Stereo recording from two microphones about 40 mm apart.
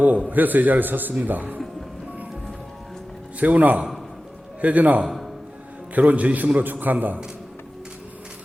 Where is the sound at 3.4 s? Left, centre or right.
Right.